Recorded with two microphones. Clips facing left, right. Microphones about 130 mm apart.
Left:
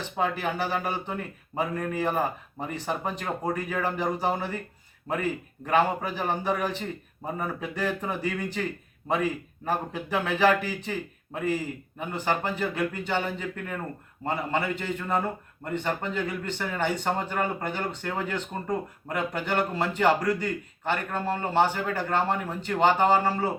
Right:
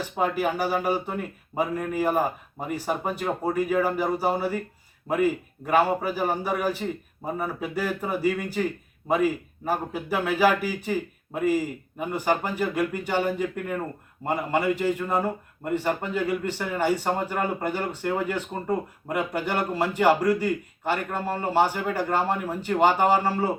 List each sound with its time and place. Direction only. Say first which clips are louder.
0.0 s a man's voice: right 3 dB; 10° right (ahead or behind)